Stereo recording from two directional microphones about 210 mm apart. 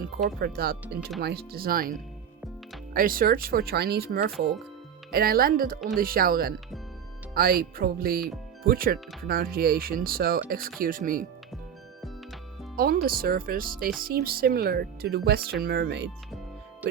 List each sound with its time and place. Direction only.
0.3 s speech: 50° right (ahead or behind)
12.7 s speech: 45° right (ahead or behind)